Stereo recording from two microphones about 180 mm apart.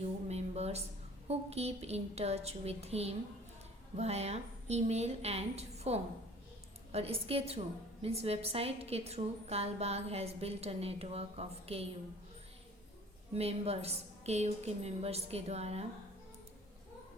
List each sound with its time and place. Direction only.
0.3 s a sound: 35° right (ahead or behind)
1.3 s a woman's voice: 35° right (ahead or behind)
13.3 s a woman's voice: 35° right (ahead or behind)